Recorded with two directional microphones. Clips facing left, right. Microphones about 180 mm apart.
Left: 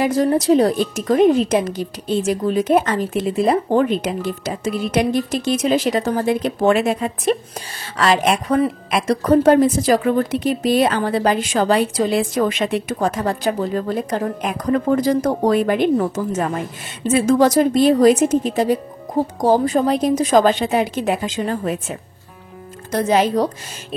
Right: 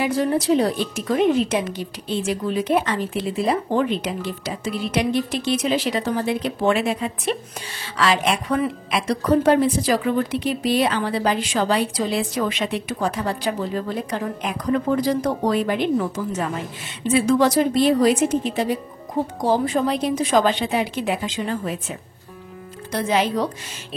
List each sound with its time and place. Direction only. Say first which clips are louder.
0.0 s a woman's voice: left 4 dB; 40° left (ahead or behind)